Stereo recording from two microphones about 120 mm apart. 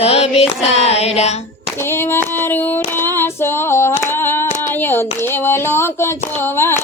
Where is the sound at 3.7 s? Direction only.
20° left (ahead or behind).